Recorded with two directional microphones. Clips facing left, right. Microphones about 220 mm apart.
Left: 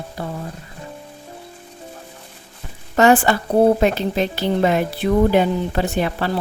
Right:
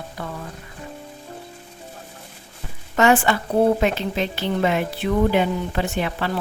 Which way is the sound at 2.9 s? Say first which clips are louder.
Left 3 dB; 35° left (ahead or behind).